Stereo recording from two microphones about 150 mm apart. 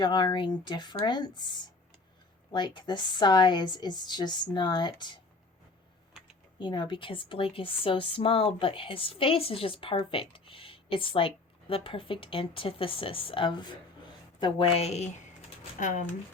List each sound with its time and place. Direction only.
0.0 s a woman's voice: 30° left (ahead or behind)
6.6 s a woman's voice: 30° left (ahead or behind); by 15.1 s 45° left (ahead or behind)
15.8 s speech: 55° left (ahead or behind)